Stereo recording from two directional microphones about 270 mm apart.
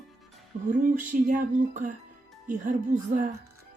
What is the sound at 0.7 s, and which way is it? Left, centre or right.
Speech, right.